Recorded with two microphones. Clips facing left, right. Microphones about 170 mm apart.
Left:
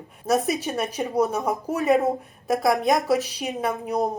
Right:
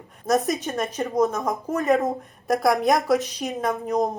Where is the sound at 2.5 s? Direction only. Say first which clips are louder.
Right 1 dB; centre (ahead or behind).